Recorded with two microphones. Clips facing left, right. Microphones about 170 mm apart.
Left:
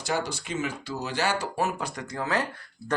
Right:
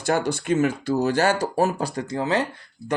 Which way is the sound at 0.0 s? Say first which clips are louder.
Right 7 dB; 55° right (ahead or behind).